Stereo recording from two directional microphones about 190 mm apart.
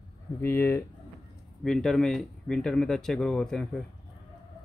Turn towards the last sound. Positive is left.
turn(degrees=0)  # may be behind; listen again after turning